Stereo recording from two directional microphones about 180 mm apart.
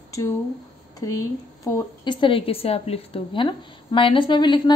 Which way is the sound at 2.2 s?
30° left (ahead or behind).